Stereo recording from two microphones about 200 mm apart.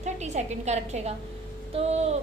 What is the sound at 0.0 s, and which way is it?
A woman's voice, 35° right (ahead or behind).